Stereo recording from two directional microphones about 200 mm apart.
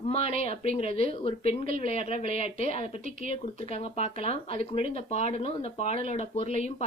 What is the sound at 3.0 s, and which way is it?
Speech, 40° right (ahead or behind).